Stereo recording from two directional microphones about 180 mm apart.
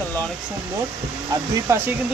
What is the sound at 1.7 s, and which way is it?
Speech, 15° right (ahead or behind).